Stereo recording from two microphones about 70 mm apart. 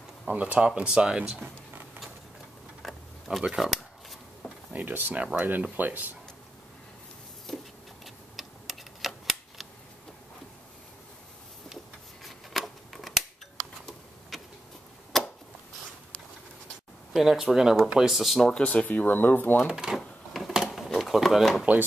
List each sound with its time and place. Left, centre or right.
0.3 s speech: centre
2.8 s a sound: centre
4.7 s speech: right
7.4 s tick-tock: centre
11.7 s a sound: centre
14.3 s vehicle: centre
15.1 s a sound: centre
17.1 s speech: centre
18.5 s speech: centre
19.7 s speech: centre
20.0 s a sound: centre
20.9 s bird: centre